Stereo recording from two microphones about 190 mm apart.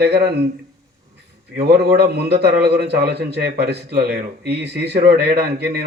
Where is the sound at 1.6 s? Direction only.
55° right (ahead or behind).